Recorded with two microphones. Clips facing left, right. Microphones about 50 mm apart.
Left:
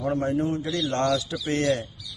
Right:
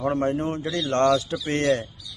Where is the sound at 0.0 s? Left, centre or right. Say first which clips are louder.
Right 1 dB; right.